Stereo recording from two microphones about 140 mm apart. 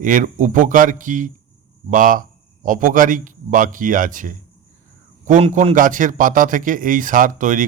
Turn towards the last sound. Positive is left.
turn(degrees=-70)  # may be behind; listen again after turning